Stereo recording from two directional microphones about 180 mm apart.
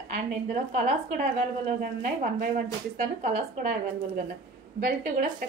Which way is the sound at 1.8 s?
45° right (ahead or behind).